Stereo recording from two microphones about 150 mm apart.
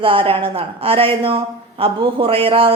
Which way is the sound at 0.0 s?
35° right (ahead or behind).